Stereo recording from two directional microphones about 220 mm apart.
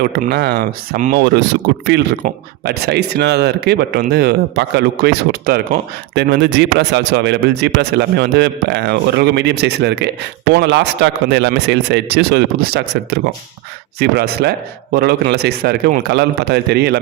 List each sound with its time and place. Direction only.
0.0 s a man's voice: 45° right (ahead or behind)